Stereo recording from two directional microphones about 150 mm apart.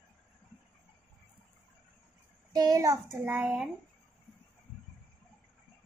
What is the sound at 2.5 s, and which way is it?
Speech, 25° right (ahead or behind).